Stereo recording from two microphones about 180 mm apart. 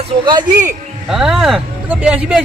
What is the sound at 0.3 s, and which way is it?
Speech, 25° right (ahead or behind).